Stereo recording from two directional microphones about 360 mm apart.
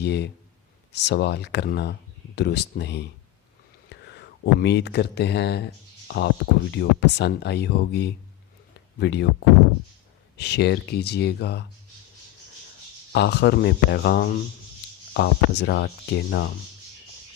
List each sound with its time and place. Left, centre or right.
0.0 s speech: left
10.3 s speech: left
13.1 s speech: left